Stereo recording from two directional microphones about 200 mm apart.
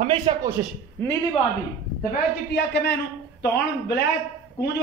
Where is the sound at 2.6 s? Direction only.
55° left (ahead or behind).